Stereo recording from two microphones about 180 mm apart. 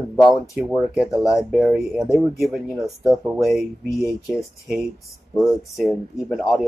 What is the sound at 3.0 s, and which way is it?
Speech, 15° right (ahead or behind).